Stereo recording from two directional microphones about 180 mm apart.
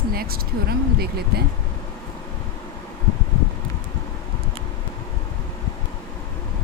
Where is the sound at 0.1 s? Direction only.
55° right (ahead or behind).